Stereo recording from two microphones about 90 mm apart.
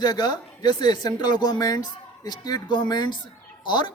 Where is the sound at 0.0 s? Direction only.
50° left (ahead or behind).